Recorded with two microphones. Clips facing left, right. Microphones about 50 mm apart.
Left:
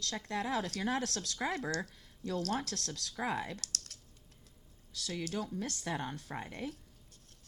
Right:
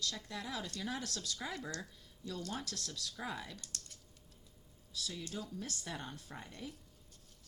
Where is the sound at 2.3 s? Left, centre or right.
Left.